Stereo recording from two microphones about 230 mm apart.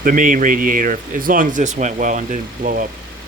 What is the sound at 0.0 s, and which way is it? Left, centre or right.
Speech, right.